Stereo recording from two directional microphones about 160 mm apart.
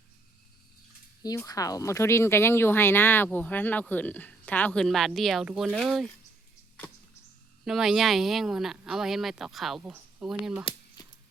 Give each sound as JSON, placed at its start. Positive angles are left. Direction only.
{"t": 1.4, "sound": "speech", "side_deg": 20}
{"t": 7.6, "sound": "speech", "side_deg": -5}
{"t": 11.0, "sound": "a sound", "side_deg": 25}